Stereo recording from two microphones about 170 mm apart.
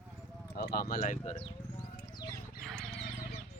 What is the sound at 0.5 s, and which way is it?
Speech, 65° left (ahead or behind).